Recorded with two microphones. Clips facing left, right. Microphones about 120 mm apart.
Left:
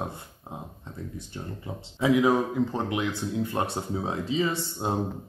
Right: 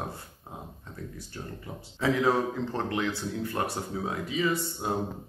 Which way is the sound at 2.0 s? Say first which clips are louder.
Left 3 dB; 15° left (ahead or behind).